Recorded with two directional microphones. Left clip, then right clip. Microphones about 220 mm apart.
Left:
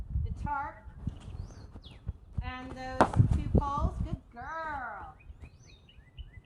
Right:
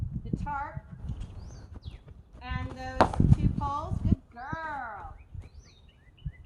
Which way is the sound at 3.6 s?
Centre (ahead or behind).